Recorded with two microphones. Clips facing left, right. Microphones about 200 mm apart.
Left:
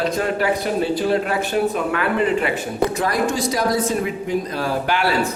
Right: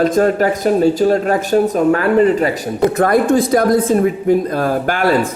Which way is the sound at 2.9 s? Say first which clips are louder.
Right 8 dB; 55° right (ahead or behind).